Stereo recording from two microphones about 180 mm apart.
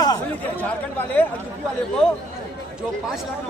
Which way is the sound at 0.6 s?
10° left (ahead or behind).